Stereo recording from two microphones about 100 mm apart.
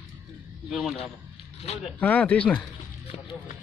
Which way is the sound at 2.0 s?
15° left (ahead or behind).